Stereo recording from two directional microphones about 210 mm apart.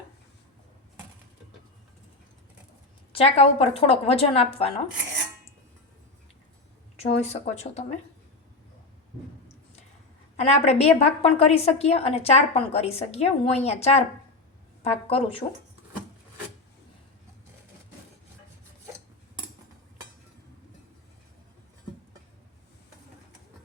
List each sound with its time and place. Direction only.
3.1 s a woman's voice: 25° left (ahead or behind)
6.9 s speech: 30° left (ahead or behind)
10.3 s a woman's voice: 30° left (ahead or behind)